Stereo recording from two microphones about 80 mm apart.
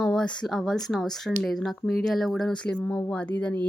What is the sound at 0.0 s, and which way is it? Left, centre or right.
Speech, centre.